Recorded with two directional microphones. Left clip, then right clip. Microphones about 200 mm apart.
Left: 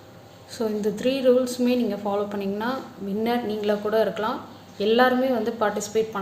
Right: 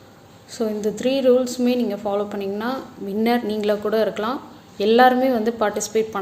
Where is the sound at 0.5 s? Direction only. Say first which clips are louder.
Right 2 dB; 15° right (ahead or behind).